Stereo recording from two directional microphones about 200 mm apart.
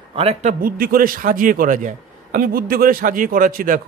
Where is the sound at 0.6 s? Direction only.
45° right (ahead or behind).